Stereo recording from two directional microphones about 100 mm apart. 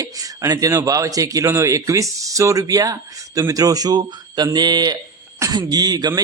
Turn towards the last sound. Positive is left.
turn(degrees=-45)  # may be behind; listen again after turning